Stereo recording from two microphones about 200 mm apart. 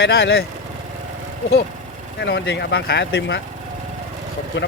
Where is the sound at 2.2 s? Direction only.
60° left (ahead or behind).